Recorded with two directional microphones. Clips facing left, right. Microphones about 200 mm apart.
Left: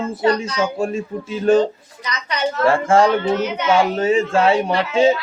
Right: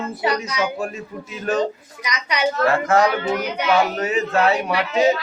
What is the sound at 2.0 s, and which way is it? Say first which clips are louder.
Speech: even; 10° right (ahead or behind).